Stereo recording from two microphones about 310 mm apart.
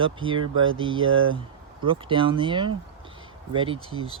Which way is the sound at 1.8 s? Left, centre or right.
Centre.